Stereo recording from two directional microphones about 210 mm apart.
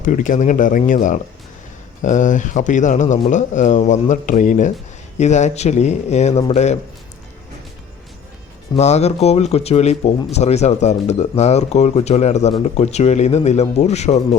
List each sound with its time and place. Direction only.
0.0 s speech: 40° left (ahead or behind)
8.7 s speech: 30° left (ahead or behind)